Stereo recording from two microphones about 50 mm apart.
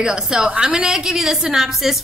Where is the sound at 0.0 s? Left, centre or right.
Centre.